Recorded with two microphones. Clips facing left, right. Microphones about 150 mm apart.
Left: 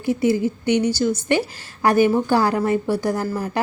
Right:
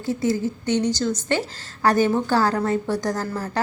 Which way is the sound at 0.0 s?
15° left (ahead or behind).